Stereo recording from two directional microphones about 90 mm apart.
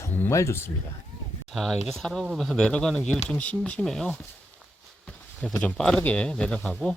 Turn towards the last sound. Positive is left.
turn(degrees=10)  # may be behind; listen again after turning